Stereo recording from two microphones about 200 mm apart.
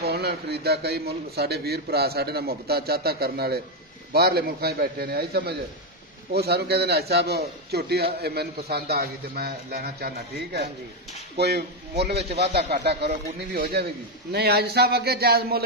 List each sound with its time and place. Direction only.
0.0 s a man's voice: 55° right (ahead or behind)